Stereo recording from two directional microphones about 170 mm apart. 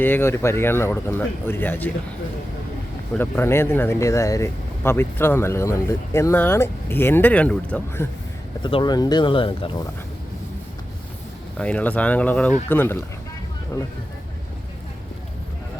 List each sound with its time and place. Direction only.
0.0 s speech: 10° left (ahead or behind)
3.2 s speech: 15° left (ahead or behind)
8.6 s speech: 25° left (ahead or behind)
11.5 s speech: 5° left (ahead or behind)